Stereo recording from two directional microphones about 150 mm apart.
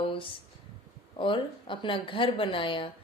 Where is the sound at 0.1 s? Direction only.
35° left (ahead or behind).